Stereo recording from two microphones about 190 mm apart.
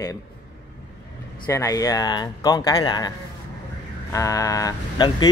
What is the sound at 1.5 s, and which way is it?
Speech, 15° left (ahead or behind).